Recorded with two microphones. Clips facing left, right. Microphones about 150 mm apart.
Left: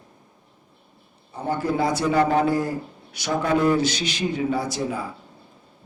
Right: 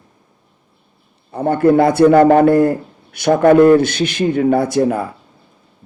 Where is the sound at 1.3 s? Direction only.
60° right (ahead or behind).